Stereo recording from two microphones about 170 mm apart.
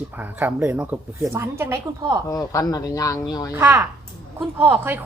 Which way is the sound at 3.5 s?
20° right (ahead or behind).